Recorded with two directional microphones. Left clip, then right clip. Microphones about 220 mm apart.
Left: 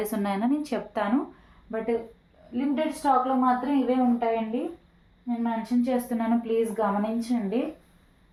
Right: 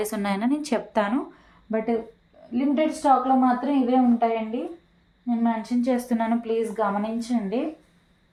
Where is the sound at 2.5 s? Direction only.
45° right (ahead or behind).